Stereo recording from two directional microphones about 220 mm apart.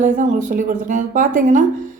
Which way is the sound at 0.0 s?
35° right (ahead or behind).